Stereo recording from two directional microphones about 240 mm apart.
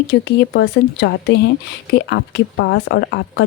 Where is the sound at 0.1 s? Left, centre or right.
Left.